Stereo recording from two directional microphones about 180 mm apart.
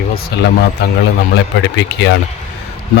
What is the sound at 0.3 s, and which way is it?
Speech, 65° left (ahead or behind).